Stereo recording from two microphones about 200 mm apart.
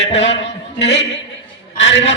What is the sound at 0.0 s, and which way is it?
A man's voice, 65° left (ahead or behind).